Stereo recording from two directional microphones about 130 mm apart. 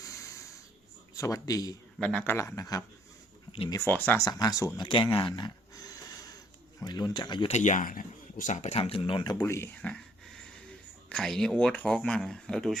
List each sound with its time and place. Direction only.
0.0 s a sound: 25° left (ahead or behind)
1.1 s speech: 25° left (ahead or behind)
2.0 s speech: 10° left (ahead or behind)
2.3 s a man's voice: 20° left (ahead or behind)
3.8 s speech: 15° left (ahead or behind)
4.2 s speech: 30° left (ahead or behind)
5.7 s a sound: 30° left (ahead or behind)
6.8 s speech: 35° left (ahead or behind)
7.4 s speech: 65° left (ahead or behind); by 9.3 s 40° left (ahead or behind)
9.3 s a man's voice: 20° left (ahead or behind)
9.8 s a sound: 5° left (ahead or behind)
11.1 s speech: 5° left (ahead or behind)